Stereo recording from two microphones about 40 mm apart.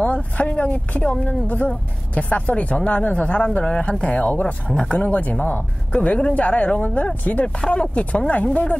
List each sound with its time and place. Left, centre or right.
0.0 s speech: left
1.7 s speech: left
4.6 s speech: centre
4.9 s speech: left
5.9 s speech: left